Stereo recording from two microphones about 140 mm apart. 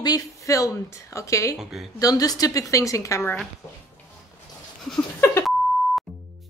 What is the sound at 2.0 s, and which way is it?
A woman's voice, 25° left (ahead or behind).